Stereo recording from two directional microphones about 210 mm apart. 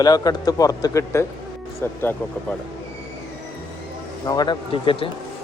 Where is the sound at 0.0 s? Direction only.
20° left (ahead or behind).